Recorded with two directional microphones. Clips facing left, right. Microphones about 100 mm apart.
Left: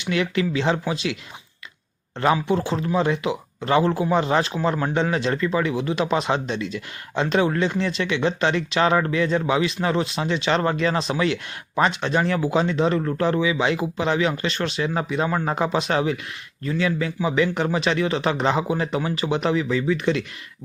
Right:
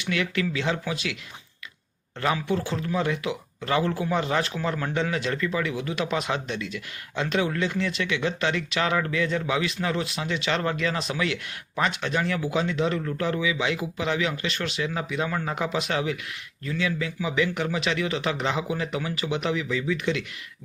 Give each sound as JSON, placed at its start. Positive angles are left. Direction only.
{"t": 0.0, "sound": "speech", "side_deg": 25}
{"t": 2.2, "sound": "speech", "side_deg": 30}